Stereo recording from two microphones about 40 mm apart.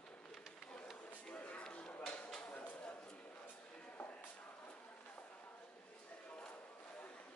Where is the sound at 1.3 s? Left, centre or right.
Left.